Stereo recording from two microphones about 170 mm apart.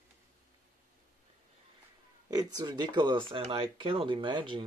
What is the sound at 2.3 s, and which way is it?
Speech, 20° right (ahead or behind).